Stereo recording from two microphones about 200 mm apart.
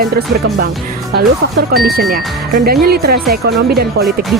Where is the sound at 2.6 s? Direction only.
50° right (ahead or behind).